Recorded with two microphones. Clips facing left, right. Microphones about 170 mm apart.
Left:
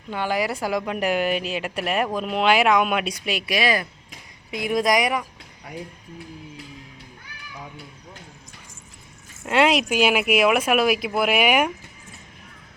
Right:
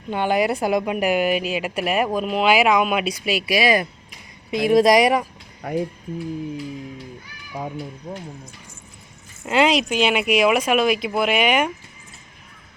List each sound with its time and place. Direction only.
0.1 s a woman's voice: 20° right (ahead or behind)
0.9 s speech: 10° right (ahead or behind)
4.5 s a woman's voice: 30° right (ahead or behind)
7.5 s speech: 50° right (ahead or behind)
9.5 s speech: centre (ahead or behind)